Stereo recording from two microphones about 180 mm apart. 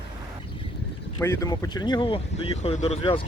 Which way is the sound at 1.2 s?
15° left (ahead or behind).